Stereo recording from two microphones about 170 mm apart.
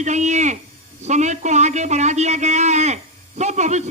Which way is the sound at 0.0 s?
45° right (ahead or behind).